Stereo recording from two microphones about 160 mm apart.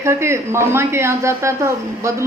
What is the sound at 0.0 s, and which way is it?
Speech, 15° right (ahead or behind).